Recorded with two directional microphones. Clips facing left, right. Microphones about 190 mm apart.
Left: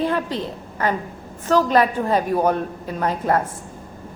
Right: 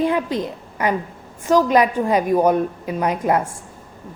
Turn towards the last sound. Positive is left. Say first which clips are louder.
# right 2 dB
turn(degrees=-15)  # may be behind; listen again after turning